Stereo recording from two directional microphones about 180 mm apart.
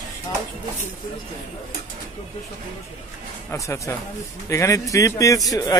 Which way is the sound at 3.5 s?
15° left (ahead or behind).